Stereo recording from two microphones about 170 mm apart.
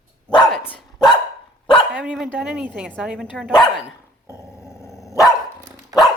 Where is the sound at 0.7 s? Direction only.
25° left (ahead or behind).